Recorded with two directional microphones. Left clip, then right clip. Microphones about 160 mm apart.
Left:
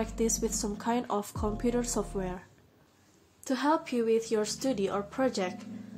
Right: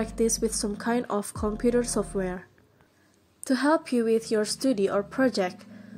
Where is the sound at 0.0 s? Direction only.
30° right (ahead or behind).